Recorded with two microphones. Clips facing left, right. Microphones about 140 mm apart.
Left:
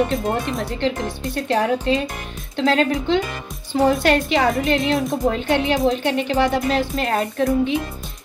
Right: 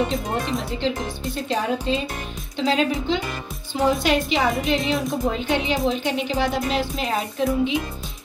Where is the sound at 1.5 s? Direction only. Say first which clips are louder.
Left 5 dB; 70° left (ahead or behind).